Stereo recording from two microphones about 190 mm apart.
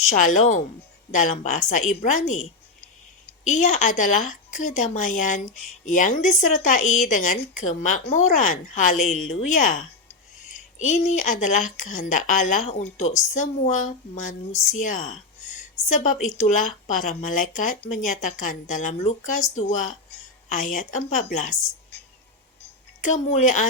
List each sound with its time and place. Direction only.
0.0 s speech: 40° left (ahead or behind)
23.0 s speech: 40° left (ahead or behind)